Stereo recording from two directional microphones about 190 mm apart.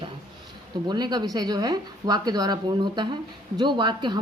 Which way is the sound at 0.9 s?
20° right (ahead or behind).